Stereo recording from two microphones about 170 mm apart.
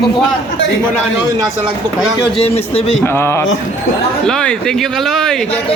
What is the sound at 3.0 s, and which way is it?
Speech, 15° left (ahead or behind).